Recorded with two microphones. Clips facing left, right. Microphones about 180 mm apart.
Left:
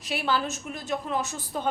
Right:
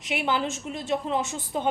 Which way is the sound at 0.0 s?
20° right (ahead or behind).